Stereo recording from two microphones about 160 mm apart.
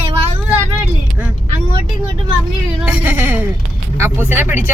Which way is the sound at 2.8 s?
10° right (ahead or behind).